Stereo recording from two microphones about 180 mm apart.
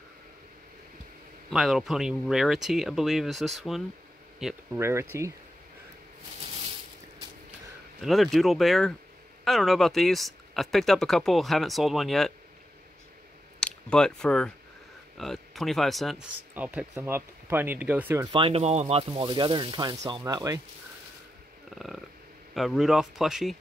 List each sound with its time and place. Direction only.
1.5 s speech: centre (ahead or behind)
4.7 s speech: 15° right (ahead or behind)
8.0 s speech: centre (ahead or behind)
13.6 s speech: 5° left (ahead or behind); by 18.3 s 10° right (ahead or behind)
18.3 s speech: 30° right (ahead or behind)
21.7 s a sound: centre (ahead or behind)
22.5 s speech: centre (ahead or behind)